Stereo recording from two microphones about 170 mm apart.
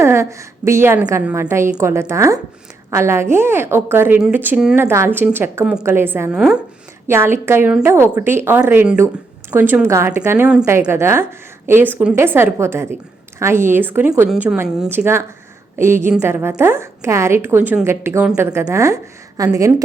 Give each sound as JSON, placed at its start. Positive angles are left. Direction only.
{"t": 0.0, "sound": "a woman's voice", "side_deg": -15}
{"t": 6.3, "sound": "speech", "side_deg": 0}
{"t": 7.1, "sound": "a woman's voice", "side_deg": -15}